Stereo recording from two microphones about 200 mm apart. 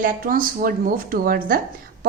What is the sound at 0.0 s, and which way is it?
A woman's voice, 45° right (ahead or behind).